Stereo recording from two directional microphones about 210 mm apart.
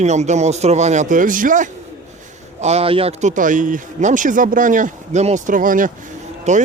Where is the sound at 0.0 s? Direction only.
35° right (ahead or behind).